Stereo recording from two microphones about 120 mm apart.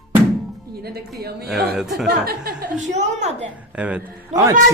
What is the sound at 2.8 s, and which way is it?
Speech, 75° right (ahead or behind).